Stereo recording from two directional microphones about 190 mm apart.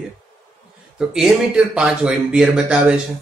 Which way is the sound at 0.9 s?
Centre (ahead or behind).